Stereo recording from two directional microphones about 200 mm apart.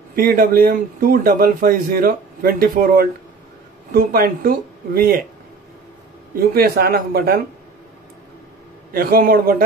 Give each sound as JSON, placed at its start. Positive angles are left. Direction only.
{"t": 0.1, "sound": "a man's voice", "side_deg": -45}
{"t": 6.5, "sound": "a man's voice", "side_deg": -50}
{"t": 8.9, "sound": "a man's voice", "side_deg": -45}